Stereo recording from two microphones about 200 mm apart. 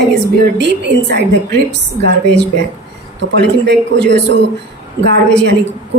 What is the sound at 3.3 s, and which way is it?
A woman's voice, 60° right (ahead or behind).